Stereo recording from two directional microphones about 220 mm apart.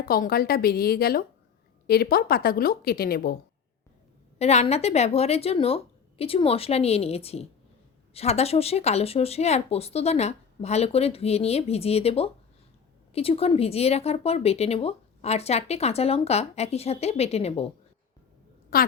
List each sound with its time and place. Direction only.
0.0 s a woman's voice: 40° left (ahead or behind)
4.4 s a woman's voice: 30° left (ahead or behind)
18.7 s speech: 40° left (ahead or behind)